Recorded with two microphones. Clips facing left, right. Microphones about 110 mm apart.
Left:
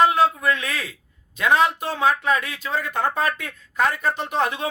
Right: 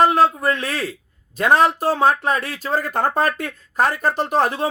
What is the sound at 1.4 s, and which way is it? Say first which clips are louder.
Speech: right 3 dB; 40° right (ahead or behind).